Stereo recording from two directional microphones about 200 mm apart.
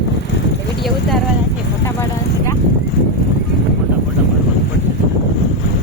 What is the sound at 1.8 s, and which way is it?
Vehicle, 15° left (ahead or behind).